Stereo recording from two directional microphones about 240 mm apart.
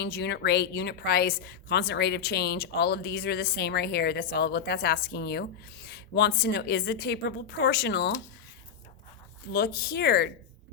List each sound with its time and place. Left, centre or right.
0.0 s a woman's voice: left
9.5 s speech: left